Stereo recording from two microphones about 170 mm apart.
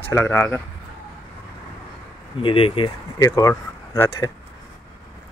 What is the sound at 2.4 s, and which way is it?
Speech, 30° left (ahead or behind).